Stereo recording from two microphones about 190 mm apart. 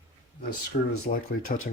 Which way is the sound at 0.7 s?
45° left (ahead or behind).